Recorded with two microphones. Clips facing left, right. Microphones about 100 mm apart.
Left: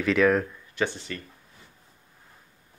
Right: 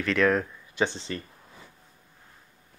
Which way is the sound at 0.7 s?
25° right (ahead or behind).